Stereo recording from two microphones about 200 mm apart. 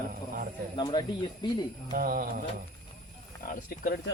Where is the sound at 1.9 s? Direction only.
45° right (ahead or behind).